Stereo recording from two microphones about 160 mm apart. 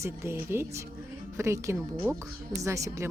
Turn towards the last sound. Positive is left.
turn(degrees=-20)  # may be behind; listen again after turning